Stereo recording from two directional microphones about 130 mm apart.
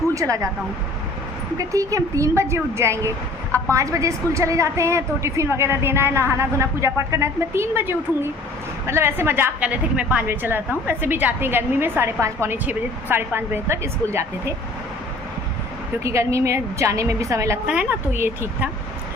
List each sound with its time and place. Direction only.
0.1 s speech: 25° right (ahead or behind)
1.5 s a woman's voice: 25° right (ahead or behind)
16.0 s a woman's voice: 20° right (ahead or behind)
17.7 s a woman's voice: 10° right (ahead or behind)